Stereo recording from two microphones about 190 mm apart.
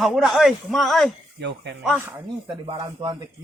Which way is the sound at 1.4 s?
65° right (ahead or behind).